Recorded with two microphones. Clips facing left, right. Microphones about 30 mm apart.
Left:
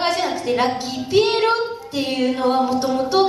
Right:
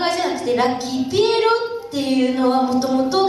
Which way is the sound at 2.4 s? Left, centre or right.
Centre.